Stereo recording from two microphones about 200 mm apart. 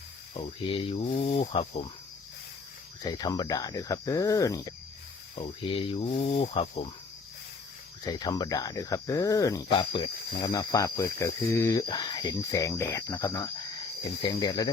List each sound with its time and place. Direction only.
0.3 s speech: 30° left (ahead or behind)
3.0 s speech: 20° left (ahead or behind)
5.7 s speech: 25° left (ahead or behind)
8.0 s speech: 20° left (ahead or behind)